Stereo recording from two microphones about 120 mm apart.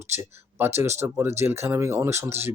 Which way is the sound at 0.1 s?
20° right (ahead or behind).